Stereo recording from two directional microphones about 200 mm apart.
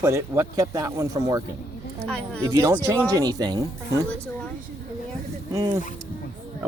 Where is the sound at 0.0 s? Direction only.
15° right (ahead or behind).